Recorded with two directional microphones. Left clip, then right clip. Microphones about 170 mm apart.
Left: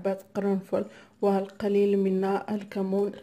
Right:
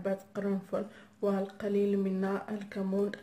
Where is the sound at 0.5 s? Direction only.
40° left (ahead or behind).